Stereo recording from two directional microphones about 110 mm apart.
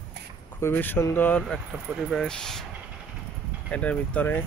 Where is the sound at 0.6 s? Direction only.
20° left (ahead or behind).